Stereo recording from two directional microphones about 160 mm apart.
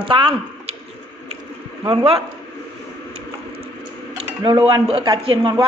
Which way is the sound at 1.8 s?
35° right (ahead or behind).